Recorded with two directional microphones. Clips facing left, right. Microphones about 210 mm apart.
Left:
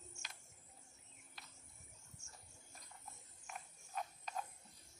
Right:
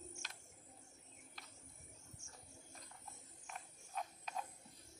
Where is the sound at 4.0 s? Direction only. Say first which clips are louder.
Even; centre (ahead or behind).